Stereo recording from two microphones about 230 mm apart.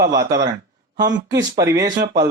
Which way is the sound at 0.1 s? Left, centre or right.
Centre.